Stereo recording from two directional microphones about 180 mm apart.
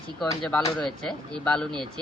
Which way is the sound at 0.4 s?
5° left (ahead or behind).